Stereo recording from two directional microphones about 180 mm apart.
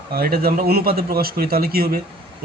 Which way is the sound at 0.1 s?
55° right (ahead or behind).